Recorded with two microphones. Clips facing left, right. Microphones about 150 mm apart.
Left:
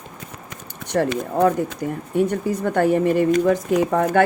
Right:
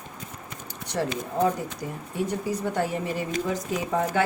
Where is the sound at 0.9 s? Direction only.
55° left (ahead or behind).